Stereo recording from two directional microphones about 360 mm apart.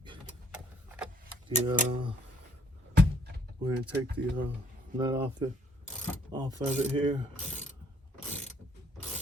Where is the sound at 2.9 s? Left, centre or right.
Right.